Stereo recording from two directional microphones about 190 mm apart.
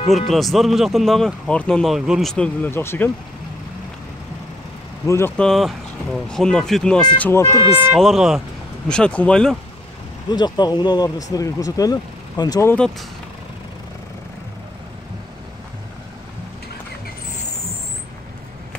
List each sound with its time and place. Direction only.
0.3 s speech: centre (ahead or behind)
5.0 s speech: 15° left (ahead or behind)
5.5 s speech: centre (ahead or behind); by 7.9 s 15° left (ahead or behind)
7.9 s speech: centre (ahead or behind)
10.3 s speech: 20° left (ahead or behind)